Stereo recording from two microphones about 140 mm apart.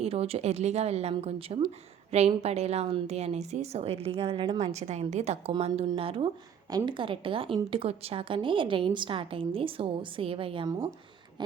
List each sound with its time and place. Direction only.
0.0 s a woman's voice: 45° right (ahead or behind)
4.7 s a woman's voice: 55° right (ahead or behind)
6.7 s a woman's voice: 30° right (ahead or behind)